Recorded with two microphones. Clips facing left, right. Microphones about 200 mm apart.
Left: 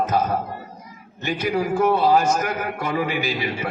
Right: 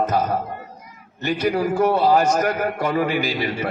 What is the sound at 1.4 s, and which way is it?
A man's voice, 50° right (ahead or behind).